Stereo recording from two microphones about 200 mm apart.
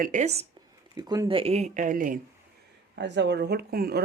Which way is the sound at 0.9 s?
20° right (ahead or behind).